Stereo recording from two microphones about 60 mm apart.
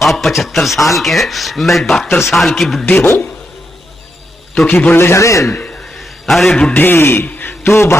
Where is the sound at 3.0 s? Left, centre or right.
Left.